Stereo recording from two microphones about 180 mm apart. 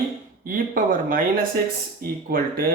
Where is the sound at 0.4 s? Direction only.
50° right (ahead or behind).